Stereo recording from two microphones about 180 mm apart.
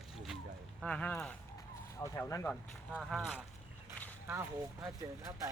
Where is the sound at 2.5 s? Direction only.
Centre (ahead or behind).